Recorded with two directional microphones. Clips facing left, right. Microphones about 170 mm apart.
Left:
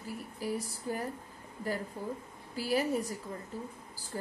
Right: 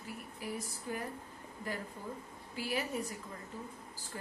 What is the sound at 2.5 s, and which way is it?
Speech, 35° left (ahead or behind).